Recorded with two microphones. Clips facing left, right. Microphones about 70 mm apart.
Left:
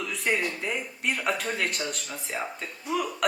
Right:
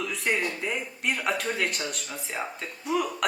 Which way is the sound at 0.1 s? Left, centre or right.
Centre.